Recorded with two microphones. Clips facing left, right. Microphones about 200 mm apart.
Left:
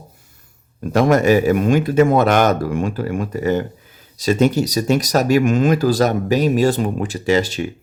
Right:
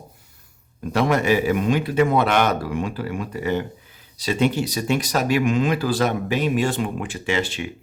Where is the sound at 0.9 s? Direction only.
45° left (ahead or behind).